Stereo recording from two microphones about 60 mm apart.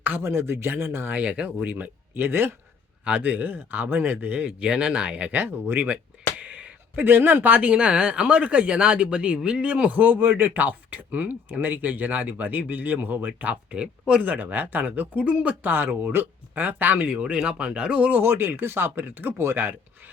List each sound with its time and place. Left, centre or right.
0.0 s speech: right
1.1 s speech: right
3.0 s speech: right
4.4 s speech: centre
5.4 s speech: right
6.4 s a sound: right
7.0 s speech: right
18.2 s speech: right